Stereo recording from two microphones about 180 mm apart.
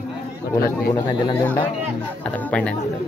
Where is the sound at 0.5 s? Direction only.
55° left (ahead or behind).